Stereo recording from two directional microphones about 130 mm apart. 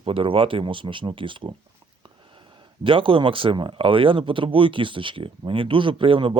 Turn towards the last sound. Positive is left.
turn(degrees=-40)  # may be behind; listen again after turning